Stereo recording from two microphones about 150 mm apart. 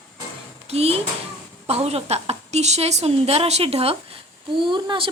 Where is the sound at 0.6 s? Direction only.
45° right (ahead or behind).